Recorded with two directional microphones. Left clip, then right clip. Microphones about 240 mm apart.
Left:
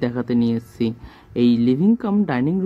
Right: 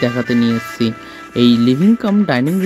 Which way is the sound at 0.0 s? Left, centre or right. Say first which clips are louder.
Right 6 dB; right.